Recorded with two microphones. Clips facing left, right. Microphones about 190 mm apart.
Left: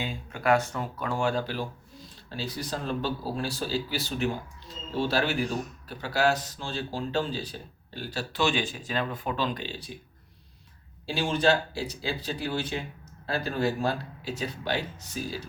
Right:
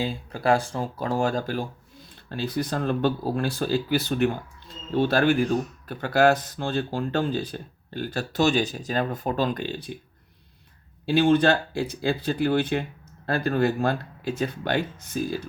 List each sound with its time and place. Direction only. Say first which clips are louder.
0.0 s speech: right 4 dB; 35° right (ahead or behind)
2.3 s speech: right 7 dB; 55° right (ahead or behind)
11.0 s speech: right 6 dB; 55° right (ahead or behind)